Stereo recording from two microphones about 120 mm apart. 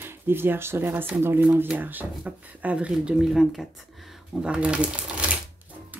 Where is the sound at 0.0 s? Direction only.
20° right (ahead or behind).